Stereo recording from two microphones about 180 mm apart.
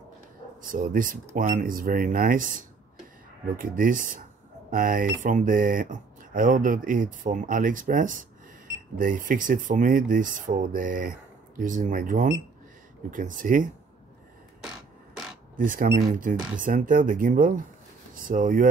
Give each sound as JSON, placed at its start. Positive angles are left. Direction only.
{"t": 0.6, "sound": "speech", "side_deg": -50}
{"t": 15.5, "sound": "speech", "side_deg": -50}